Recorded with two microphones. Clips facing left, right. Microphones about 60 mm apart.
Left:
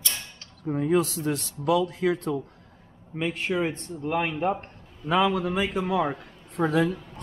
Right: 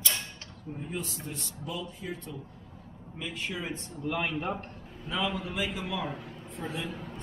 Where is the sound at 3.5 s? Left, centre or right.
Left.